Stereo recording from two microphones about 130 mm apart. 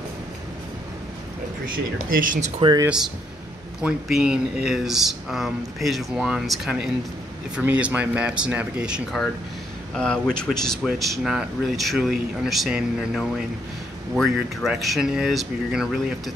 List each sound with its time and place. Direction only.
2.6 s speech: 45° right (ahead or behind)
3.8 s speech: 5° right (ahead or behind)
9.9 s speech: 5° left (ahead or behind)